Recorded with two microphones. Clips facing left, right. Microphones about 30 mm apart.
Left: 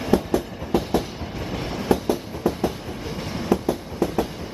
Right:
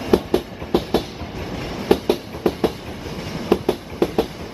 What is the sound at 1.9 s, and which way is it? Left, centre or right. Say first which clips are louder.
Train: right 4 dB; right.